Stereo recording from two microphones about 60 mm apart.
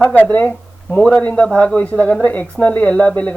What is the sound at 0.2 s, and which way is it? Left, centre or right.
Speech, left.